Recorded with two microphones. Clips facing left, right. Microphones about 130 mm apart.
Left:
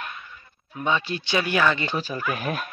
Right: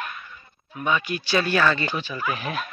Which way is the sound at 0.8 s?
25° left (ahead or behind).